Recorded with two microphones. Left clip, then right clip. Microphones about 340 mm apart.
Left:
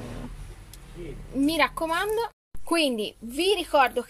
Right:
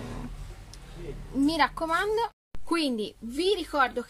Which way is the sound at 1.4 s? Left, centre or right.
Centre.